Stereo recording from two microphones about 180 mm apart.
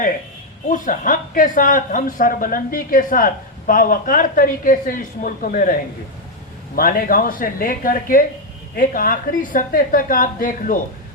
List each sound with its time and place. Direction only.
0.7 s speech: 45° left (ahead or behind)
6.7 s speech: 50° left (ahead or behind)